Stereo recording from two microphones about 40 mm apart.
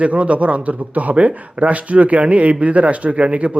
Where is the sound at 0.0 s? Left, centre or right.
Right.